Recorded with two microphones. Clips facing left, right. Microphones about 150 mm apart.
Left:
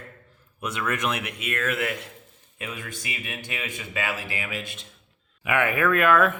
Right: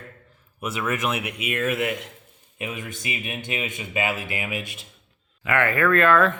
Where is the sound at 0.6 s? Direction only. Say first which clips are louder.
Right 2 dB; 5° right (ahead or behind).